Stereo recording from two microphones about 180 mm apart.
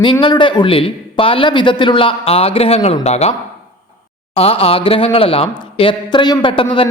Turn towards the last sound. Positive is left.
turn(degrees=30)  # may be behind; listen again after turning